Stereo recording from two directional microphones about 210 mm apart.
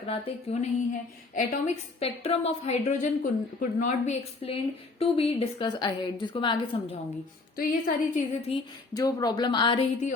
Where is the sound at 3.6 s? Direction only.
40° left (ahead or behind); by 6.6 s 25° left (ahead or behind).